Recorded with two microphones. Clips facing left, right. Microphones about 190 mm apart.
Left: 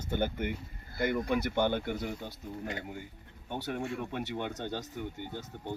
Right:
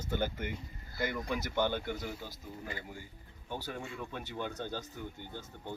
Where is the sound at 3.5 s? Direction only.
65° left (ahead or behind).